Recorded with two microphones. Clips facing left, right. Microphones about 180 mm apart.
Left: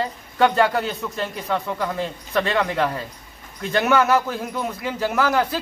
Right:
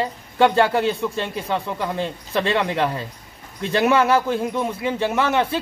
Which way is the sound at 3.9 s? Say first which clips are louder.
Even; 30° right (ahead or behind).